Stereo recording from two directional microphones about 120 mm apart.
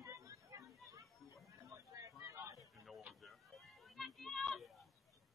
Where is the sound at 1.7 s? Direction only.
25° right (ahead or behind).